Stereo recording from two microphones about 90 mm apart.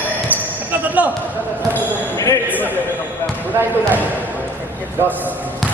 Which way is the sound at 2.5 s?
20° left (ahead or behind).